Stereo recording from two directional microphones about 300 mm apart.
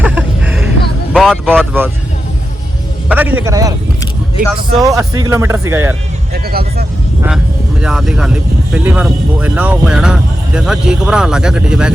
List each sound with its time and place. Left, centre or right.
0.0 s a sound: centre
1.1 s speech: centre
3.1 s speech: centre
4.8 s speech: centre
6.3 s speech: right
7.8 s speech: centre